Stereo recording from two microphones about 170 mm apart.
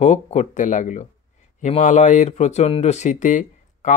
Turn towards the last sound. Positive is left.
turn(degrees=45)  # may be behind; listen again after turning